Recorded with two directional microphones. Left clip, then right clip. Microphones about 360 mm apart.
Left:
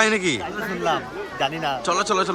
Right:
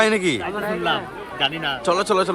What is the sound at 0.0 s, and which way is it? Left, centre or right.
Speech, centre.